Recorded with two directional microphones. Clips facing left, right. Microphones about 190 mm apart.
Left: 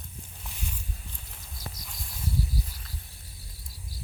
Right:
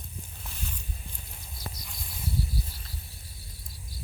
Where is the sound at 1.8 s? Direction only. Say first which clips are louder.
Even; centre (ahead or behind).